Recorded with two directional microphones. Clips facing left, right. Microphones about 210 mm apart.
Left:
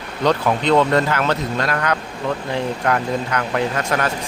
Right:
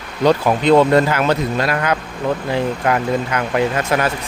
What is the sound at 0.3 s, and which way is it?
Speech, 10° right (ahead or behind).